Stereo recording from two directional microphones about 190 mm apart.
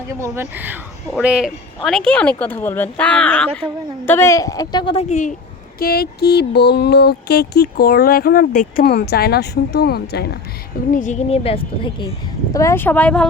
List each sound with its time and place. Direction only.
0.2 s a woman's voice: 10° right (ahead or behind); by 5.3 s 40° left (ahead or behind)
5.8 s music: 55° left (ahead or behind)
10.9 s a woman's voice: 40° left (ahead or behind)
12.5 s speech: 15° left (ahead or behind)